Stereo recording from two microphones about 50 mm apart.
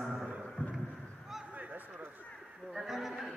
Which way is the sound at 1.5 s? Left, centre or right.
Right.